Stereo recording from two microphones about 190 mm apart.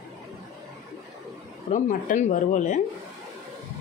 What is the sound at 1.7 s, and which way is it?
Speech, 45° left (ahead or behind).